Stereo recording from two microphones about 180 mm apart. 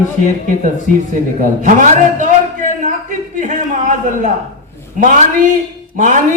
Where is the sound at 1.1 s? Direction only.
45° right (ahead or behind).